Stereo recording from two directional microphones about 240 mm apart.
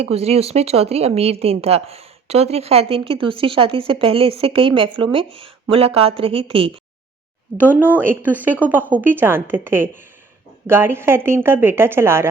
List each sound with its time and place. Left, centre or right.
0.0 s speech: right
7.7 s a woman's voice: centre